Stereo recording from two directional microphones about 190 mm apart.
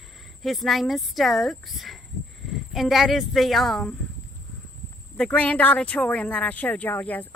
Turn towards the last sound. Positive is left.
turn(degrees=10)  # may be behind; listen again after turning